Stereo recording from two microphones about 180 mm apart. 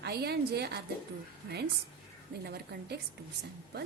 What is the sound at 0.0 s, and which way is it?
Speech, 65° right (ahead or behind).